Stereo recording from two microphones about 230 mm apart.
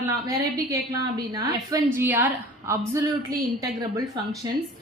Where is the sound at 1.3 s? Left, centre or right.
Centre.